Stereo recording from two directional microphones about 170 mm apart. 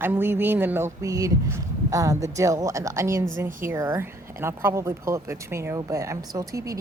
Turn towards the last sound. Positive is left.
turn(degrees=-20)  # may be behind; listen again after turning